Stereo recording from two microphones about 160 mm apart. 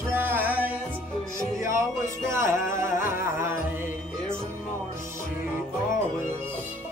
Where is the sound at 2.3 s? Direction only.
15° right (ahead or behind).